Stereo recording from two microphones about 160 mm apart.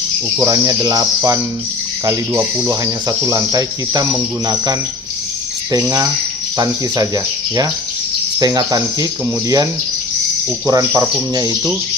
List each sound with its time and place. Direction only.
0.4 s speech: 20° right (ahead or behind)
8.4 s speech: 25° right (ahead or behind)
10.7 s speech: 20° right (ahead or behind)